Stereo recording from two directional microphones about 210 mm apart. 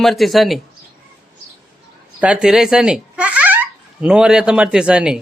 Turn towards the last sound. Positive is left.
turn(degrees=-5)  # may be behind; listen again after turning